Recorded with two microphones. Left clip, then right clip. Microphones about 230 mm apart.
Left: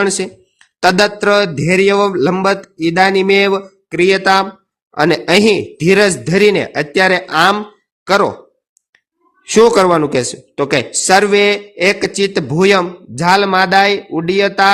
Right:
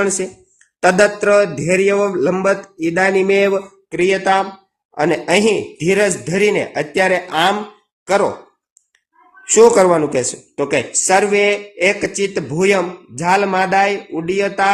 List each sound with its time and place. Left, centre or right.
0.8 s a man's voice: left
9.6 s a man's voice: left